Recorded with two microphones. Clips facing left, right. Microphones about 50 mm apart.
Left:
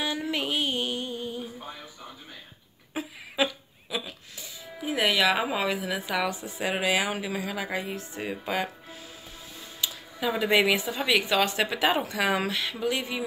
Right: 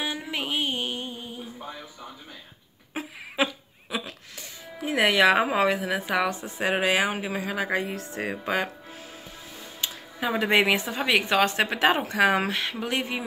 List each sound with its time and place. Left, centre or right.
0.0 s music: centre
2.9 s a sound: right
4.0 s speech: right
7.8 s speech: right
9.8 s speech: right